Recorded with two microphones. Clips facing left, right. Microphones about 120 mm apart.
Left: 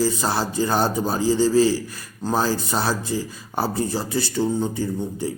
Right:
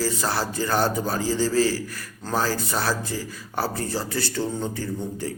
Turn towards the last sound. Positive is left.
turn(degrees=15)  # may be behind; listen again after turning